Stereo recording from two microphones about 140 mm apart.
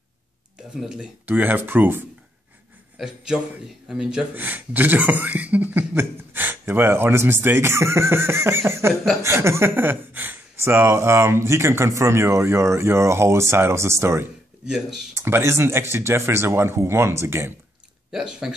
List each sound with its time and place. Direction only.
0.6 s speech: 5° right (ahead or behind)
3.9 s speech: 5° right (ahead or behind); by 14.2 s 20° right (ahead or behind)
14.7 s speech: centre (ahead or behind)
15.1 s speech: 20° right (ahead or behind)
18.1 s speech: 5° right (ahead or behind)